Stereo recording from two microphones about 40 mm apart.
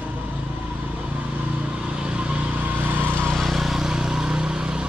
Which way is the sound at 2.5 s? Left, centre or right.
Right.